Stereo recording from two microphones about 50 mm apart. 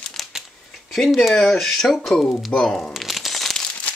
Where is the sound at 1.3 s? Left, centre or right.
Centre.